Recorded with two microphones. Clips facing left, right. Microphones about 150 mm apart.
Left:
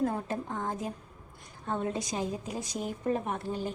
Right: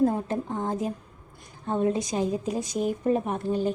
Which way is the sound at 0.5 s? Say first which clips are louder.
Right 6 dB; 20° right (ahead or behind).